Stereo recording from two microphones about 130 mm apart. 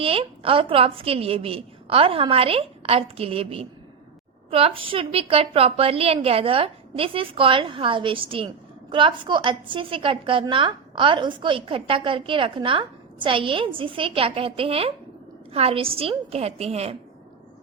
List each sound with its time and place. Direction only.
0.0 s a woman's voice: 45° right (ahead or behind)